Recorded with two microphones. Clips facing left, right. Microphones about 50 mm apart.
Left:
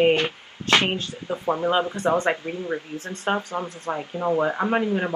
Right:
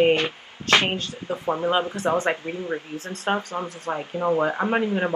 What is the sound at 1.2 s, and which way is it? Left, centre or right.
Speech, right.